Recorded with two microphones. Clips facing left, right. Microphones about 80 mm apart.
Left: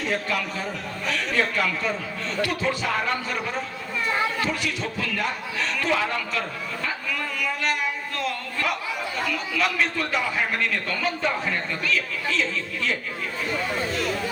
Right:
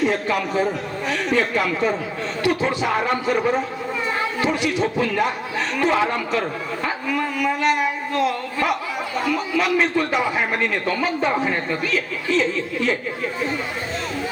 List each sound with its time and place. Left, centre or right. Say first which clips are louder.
0.0 s a man's voice: right 6 dB; right